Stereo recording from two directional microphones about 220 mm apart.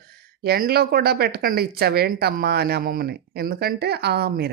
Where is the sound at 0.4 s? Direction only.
45° right (ahead or behind).